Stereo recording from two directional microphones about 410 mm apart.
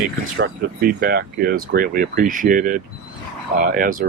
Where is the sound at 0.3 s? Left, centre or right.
Right.